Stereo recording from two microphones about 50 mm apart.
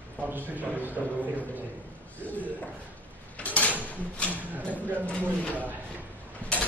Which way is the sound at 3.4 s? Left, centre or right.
Left.